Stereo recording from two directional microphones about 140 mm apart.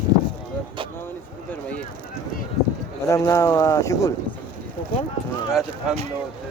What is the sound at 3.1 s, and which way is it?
Speech, 20° left (ahead or behind).